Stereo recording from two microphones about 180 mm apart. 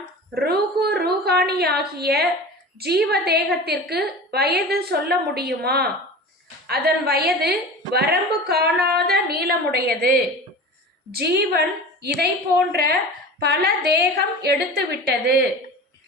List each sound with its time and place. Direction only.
0.3 s a sound: 60° right (ahead or behind)
3.1 s a woman's voice: 65° right (ahead or behind)
12.7 s a woman's voice: 60° right (ahead or behind)